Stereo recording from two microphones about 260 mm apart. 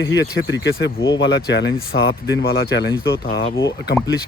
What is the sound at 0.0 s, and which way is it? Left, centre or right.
Speech, left.